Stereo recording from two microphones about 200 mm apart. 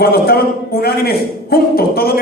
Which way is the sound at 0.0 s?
50° left (ahead or behind).